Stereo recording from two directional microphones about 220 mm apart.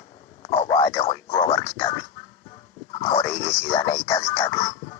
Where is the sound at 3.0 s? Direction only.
20° left (ahead or behind).